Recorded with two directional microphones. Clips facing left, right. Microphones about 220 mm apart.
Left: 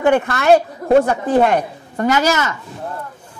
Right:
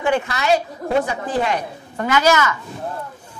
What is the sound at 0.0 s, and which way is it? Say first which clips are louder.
A woman's voice: left 5 dB; 55° left (ahead or behind).